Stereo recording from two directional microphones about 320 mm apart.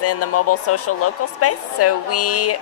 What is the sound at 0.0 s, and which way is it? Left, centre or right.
A woman's voice, left.